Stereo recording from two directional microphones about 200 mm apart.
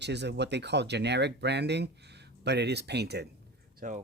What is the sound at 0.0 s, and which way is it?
Speech, 60° right (ahead or behind).